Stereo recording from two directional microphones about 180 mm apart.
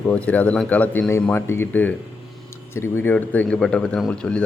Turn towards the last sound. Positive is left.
turn(degrees=5)  # may be behind; listen again after turning